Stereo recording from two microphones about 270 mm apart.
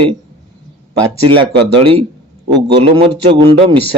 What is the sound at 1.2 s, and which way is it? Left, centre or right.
A man's voice, centre.